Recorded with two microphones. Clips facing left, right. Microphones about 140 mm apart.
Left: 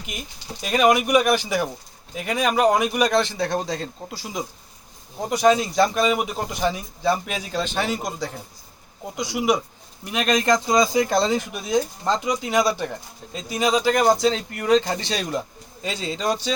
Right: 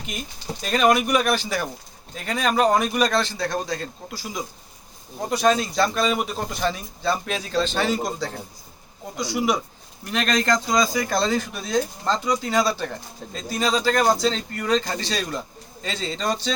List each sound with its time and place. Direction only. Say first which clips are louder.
0.6 s a man's voice: left 1 dB; 10° left (ahead or behind)